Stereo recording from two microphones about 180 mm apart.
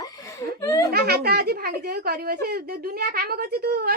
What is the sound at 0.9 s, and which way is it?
Speech, 60° right (ahead or behind).